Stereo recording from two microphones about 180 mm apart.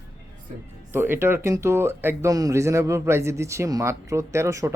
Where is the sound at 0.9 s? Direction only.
10° right (ahead or behind).